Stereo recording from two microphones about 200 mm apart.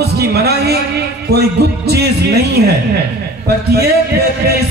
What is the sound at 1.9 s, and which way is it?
Speech, 55° right (ahead or behind).